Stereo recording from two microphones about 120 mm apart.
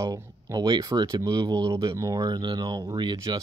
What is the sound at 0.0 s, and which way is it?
Speech, 30° right (ahead or behind).